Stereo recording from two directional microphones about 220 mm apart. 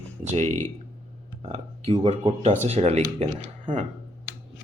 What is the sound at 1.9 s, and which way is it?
Speech, 25° right (ahead or behind).